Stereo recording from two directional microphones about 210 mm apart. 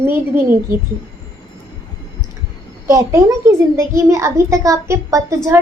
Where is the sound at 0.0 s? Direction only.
10° right (ahead or behind).